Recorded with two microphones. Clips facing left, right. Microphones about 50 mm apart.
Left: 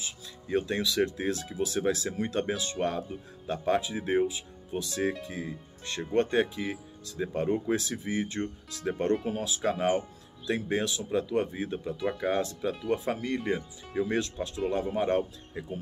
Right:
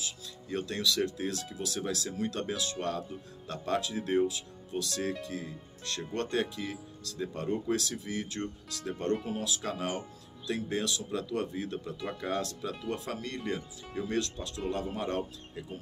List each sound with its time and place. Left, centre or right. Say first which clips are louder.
0.0 s speech: left 1 dB; left
12.0 s speech: left 10 dB; centre
12.3 s speech: left 3 dB; centre